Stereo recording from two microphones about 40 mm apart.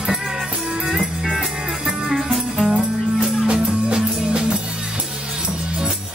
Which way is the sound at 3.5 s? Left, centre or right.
Right.